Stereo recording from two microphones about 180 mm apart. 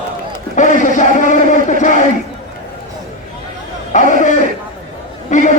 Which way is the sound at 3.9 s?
45° left (ahead or behind).